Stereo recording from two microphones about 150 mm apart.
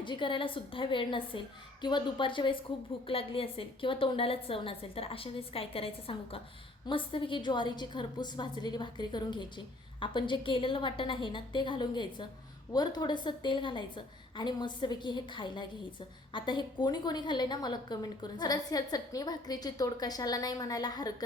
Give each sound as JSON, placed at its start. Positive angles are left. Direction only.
{"t": 0.0, "sound": "a woman's voice", "side_deg": 30}